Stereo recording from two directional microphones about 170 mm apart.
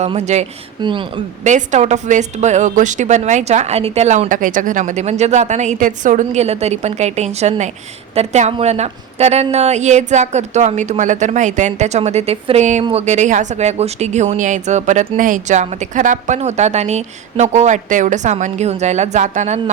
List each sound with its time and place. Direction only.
0.0 s a woman's voice: 40° right (ahead or behind)
0.8 s speech: 30° right (ahead or behind)
1.5 s a woman's voice: 45° right (ahead or behind)